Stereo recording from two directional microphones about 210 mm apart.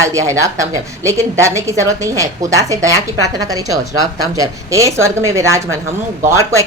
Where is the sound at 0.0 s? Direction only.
15° right (ahead or behind).